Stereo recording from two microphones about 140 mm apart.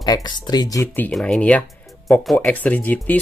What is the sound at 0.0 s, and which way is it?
Speech, 30° left (ahead or behind).